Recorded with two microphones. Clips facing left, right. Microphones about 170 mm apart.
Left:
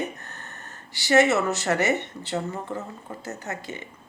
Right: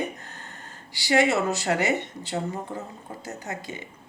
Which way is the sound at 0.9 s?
15° right (ahead or behind).